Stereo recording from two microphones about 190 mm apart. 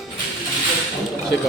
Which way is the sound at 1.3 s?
60° left (ahead or behind).